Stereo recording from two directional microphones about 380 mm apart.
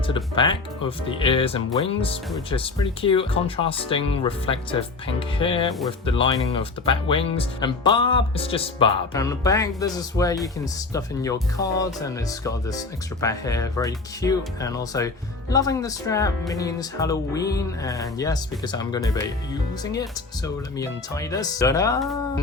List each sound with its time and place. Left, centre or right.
0.1 s speech: centre